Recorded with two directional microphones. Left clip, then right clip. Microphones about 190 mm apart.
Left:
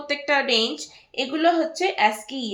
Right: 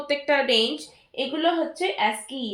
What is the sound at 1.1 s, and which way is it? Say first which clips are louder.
Speech: left 3 dB; 35° left (ahead or behind).